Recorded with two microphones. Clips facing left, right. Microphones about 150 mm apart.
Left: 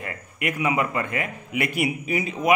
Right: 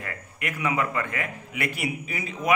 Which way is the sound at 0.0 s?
15° left (ahead or behind).